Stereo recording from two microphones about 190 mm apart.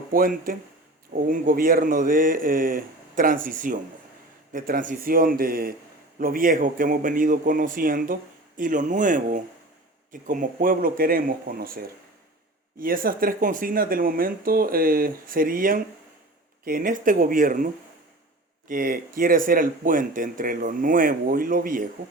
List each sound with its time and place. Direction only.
0.1 s a man's voice: 50° right (ahead or behind)
18.7 s a man's voice: 45° right (ahead or behind)